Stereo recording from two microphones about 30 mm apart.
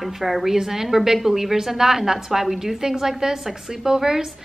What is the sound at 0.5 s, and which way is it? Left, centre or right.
A woman's voice, centre.